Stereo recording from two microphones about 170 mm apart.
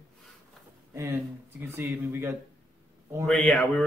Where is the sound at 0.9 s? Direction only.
15° right (ahead or behind).